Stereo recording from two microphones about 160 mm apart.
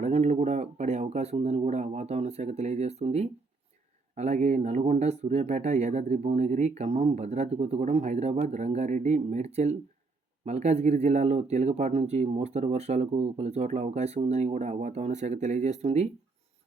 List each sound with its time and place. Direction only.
0.0 s speech: 45° right (ahead or behind)